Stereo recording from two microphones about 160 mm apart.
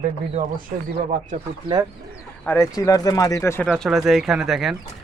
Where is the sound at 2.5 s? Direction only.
20° left (ahead or behind).